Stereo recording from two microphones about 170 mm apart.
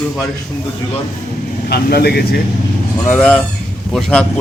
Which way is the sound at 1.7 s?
70° left (ahead or behind).